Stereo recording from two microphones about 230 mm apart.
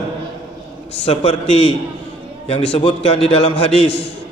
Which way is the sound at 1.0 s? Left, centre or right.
Left.